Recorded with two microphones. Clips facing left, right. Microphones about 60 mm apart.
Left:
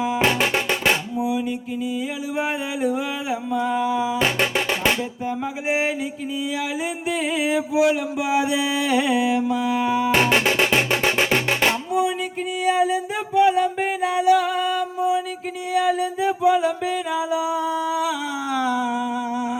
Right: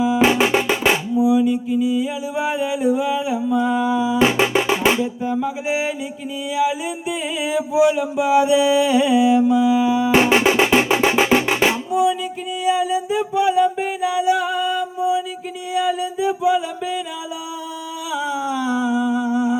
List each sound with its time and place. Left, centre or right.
0.2 s music: centre
1.1 s a sound: left
3.9 s music: left
4.2 s music: centre
5.2 s music: left
7.1 s music: left
9.5 s mantra: left
10.1 s music: centre
11.9 s music: left
18.5 s a sound: left